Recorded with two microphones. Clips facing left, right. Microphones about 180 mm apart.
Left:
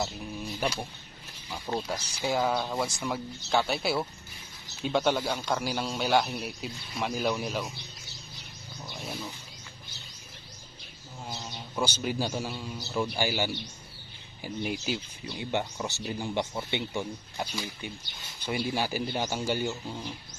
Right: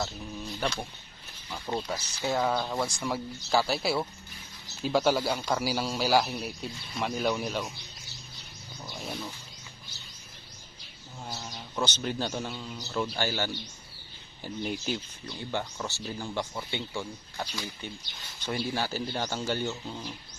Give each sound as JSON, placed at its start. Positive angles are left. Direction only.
{"t": 0.0, "sound": "a man's voice", "side_deg": 10}
{"t": 8.9, "sound": "wild animals", "side_deg": 0}
{"t": 11.3, "sound": "bird", "side_deg": 10}
{"t": 11.8, "sound": "speech", "side_deg": 10}